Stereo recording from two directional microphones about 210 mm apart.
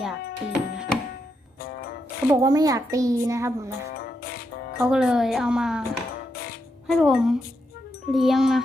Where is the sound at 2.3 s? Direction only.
15° right (ahead or behind).